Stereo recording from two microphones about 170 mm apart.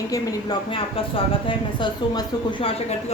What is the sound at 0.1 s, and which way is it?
Speech, 20° left (ahead or behind).